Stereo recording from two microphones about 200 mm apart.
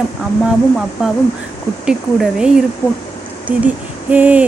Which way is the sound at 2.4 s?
5° right (ahead or behind).